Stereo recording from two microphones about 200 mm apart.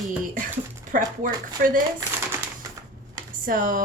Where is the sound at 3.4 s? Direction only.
45° right (ahead or behind).